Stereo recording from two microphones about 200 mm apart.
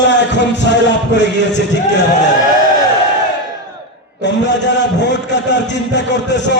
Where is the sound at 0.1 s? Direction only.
60° left (ahead or behind).